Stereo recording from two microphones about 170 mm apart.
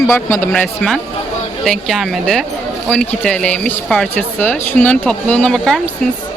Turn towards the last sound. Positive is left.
turn(degrees=5)  # may be behind; listen again after turning